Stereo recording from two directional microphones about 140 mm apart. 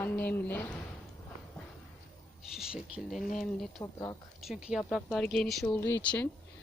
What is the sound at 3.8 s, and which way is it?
Speech, 25° left (ahead or behind).